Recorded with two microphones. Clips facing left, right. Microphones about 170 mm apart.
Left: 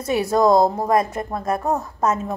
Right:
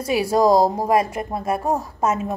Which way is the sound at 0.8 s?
10° right (ahead or behind).